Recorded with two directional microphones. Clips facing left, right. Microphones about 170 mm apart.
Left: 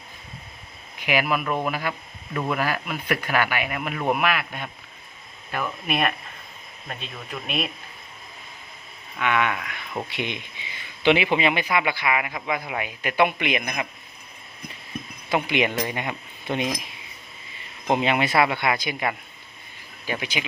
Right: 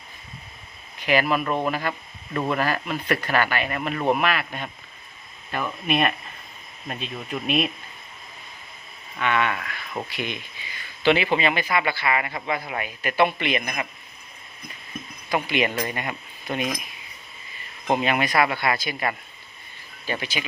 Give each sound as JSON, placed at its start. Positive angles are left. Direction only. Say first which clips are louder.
{"t": 0.9, "sound": "speech", "louder": "right 2 dB", "side_deg": 10}
{"t": 1.9, "sound": "a sound", "louder": "right 1 dB", "side_deg": -5}
{"t": 2.5, "sound": "speech", "louder": "right 1 dB", "side_deg": 10}
{"t": 7.4, "sound": "speech", "louder": "right 5 dB", "side_deg": 0}
{"t": 9.1, "sound": "speech", "louder": "even", "side_deg": 10}
{"t": 15.3, "sound": "speech", "louder": "left 1 dB", "side_deg": 20}
{"t": 17.9, "sound": "speech", "louder": "left 1 dB", "side_deg": 20}